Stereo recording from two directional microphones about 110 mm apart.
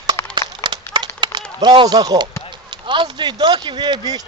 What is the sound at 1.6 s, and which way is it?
Speech, 45° right (ahead or behind).